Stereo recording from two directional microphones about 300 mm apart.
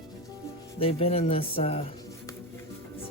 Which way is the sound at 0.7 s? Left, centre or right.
Centre.